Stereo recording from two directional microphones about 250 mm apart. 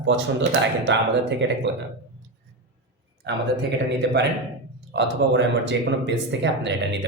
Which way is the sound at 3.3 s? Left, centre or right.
Right.